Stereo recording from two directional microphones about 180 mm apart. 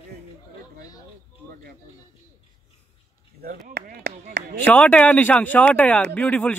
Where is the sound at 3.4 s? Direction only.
55° right (ahead or behind).